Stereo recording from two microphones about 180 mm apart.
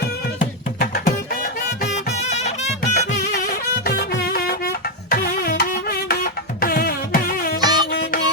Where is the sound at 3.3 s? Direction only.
60° left (ahead or behind).